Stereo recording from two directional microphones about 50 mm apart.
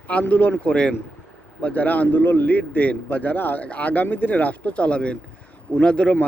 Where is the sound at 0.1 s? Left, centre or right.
Left.